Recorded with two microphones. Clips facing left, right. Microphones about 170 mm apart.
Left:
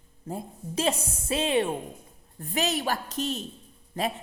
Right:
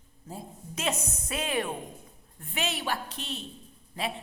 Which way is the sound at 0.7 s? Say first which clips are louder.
Left 5 dB; 30° left (ahead or behind).